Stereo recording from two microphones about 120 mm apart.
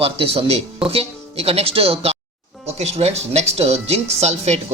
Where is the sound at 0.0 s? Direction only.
55° right (ahead or behind).